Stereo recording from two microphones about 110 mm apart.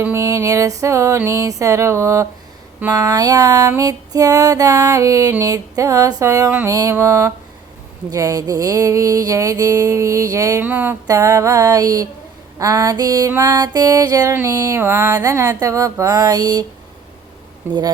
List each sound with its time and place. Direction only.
0.0 s music: 25° right (ahead or behind)
10.6 s a sound: 15° right (ahead or behind)
11.0 s music: 30° right (ahead or behind)
17.7 s music: 40° right (ahead or behind)